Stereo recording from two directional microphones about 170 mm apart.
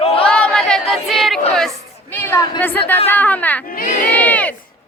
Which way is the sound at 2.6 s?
10° left (ahead or behind).